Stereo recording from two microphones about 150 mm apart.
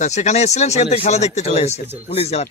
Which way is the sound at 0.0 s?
50° left (ahead or behind).